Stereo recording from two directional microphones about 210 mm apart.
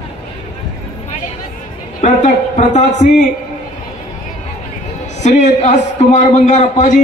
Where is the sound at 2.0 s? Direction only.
35° left (ahead or behind).